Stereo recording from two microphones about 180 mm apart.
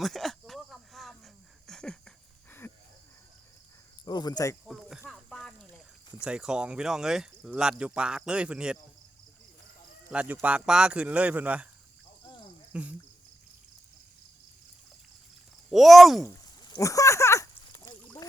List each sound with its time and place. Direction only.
0.0 s cricket: centre (ahead or behind)
4.0 s speech: 25° left (ahead or behind)
4.6 s snake: 5° right (ahead or behind)
6.1 s speech: 5° right (ahead or behind)
10.1 s speech: 5° right (ahead or behind)
12.7 s speech: 5° right (ahead or behind)
15.7 s speech: centre (ahead or behind)
16.2 s a sound: 20° left (ahead or behind)